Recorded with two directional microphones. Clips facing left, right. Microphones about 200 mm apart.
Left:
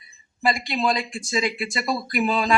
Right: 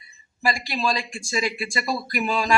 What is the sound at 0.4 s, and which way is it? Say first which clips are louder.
Speech: left 2 dB; 20° left (ahead or behind).